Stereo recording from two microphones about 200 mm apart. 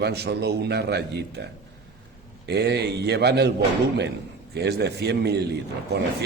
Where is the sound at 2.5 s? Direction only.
55° right (ahead or behind).